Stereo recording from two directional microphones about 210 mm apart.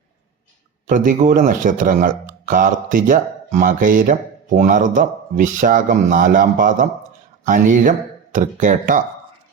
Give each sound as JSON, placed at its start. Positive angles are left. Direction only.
{"t": 0.9, "sound": "speech", "side_deg": -40}